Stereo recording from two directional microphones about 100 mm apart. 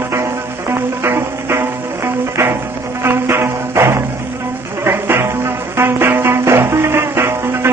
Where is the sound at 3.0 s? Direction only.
25° right (ahead or behind).